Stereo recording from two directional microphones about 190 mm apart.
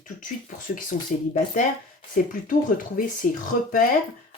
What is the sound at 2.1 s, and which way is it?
Speech, 45° left (ahead or behind).